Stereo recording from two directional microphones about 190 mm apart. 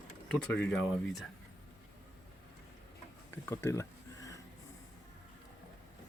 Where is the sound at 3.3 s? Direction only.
10° left (ahead or behind).